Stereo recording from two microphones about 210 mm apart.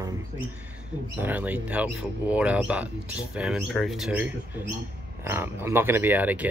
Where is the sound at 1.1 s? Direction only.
10° right (ahead or behind).